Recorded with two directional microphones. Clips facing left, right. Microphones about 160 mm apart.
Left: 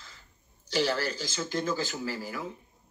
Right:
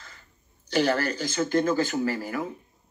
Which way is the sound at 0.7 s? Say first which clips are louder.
Right 5 dB; 55° right (ahead or behind).